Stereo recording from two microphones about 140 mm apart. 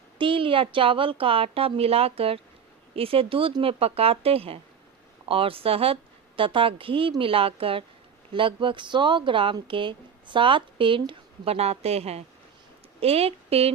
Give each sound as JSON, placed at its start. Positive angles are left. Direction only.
{"t": 0.2, "sound": "speech", "side_deg": -40}